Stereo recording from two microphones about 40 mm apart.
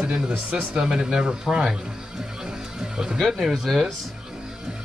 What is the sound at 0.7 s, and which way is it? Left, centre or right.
Speech, centre.